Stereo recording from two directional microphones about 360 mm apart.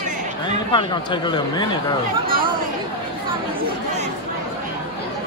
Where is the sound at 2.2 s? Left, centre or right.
Right.